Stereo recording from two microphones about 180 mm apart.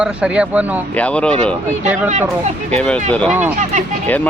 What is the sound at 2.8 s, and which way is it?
Speech, 5° left (ahead or behind).